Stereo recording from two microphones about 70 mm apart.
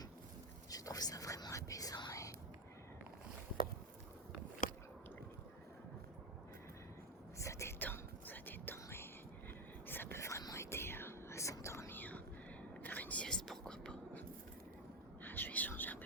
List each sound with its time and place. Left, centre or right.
0.7 s whispering: left
7.3 s whispering: left
7.8 s whispering: left
10.2 s whispering: left
11.9 s whispering: left
13.2 s whispering: centre
15.2 s whispering: left